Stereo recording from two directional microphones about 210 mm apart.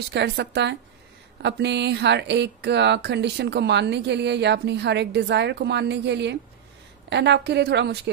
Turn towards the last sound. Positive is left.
turn(degrees=-55)  # may be behind; listen again after turning